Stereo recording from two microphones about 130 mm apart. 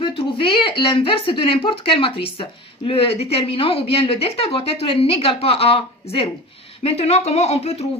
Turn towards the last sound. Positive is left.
turn(degrees=55)  # may be behind; listen again after turning